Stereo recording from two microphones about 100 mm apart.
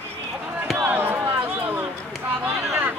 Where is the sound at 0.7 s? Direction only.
20° right (ahead or behind).